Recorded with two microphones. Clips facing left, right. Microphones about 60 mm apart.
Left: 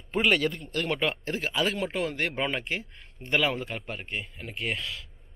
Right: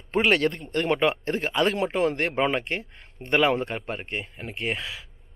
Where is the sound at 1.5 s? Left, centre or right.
Centre.